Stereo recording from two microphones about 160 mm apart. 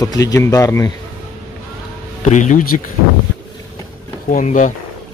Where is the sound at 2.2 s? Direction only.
50° left (ahead or behind).